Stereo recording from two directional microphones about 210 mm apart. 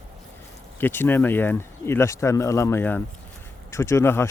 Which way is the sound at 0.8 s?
10° left (ahead or behind).